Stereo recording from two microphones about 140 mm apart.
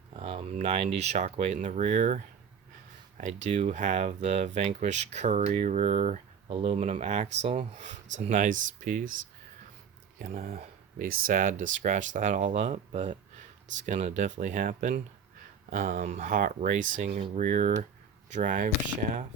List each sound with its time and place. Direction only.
0.2 s speech: 45° right (ahead or behind)
6.6 s speech: 45° right (ahead or behind); by 9.0 s 65° right (ahead or behind)
10.2 s speech: 70° right (ahead or behind)
17.1 s speech: 40° right (ahead or behind)
17.3 s speech: 60° right (ahead or behind)